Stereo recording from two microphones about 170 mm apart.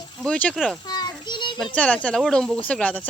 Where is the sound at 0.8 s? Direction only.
25° left (ahead or behind).